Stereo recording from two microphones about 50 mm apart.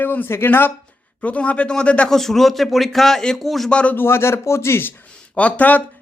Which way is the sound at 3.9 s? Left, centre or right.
Left.